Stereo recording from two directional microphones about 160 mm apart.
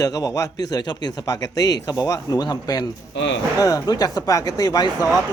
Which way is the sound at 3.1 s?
90° left.